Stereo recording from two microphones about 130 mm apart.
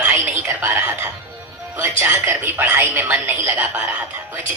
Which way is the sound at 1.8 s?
20° right (ahead or behind).